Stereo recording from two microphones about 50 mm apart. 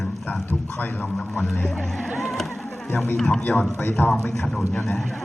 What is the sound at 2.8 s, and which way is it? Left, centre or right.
A man's voice, left.